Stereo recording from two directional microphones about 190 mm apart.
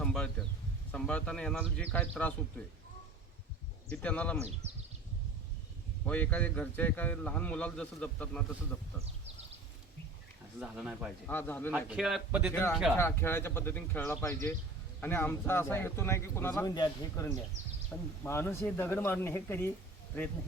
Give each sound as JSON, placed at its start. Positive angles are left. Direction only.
{"t": 0.0, "sound": "a sound", "side_deg": 5}
{"t": 0.9, "sound": "speech", "side_deg": 5}
{"t": 3.9, "sound": "a man's voice", "side_deg": 5}
{"t": 4.4, "sound": "speech", "side_deg": -35}
{"t": 6.1, "sound": "a man's voice", "side_deg": 10}
{"t": 10.6, "sound": "speech", "side_deg": -5}
{"t": 11.3, "sound": "a man's voice", "side_deg": 10}
{"t": 11.7, "sound": "a man's voice", "side_deg": -5}
{"t": 12.5, "sound": "a man's voice", "side_deg": 10}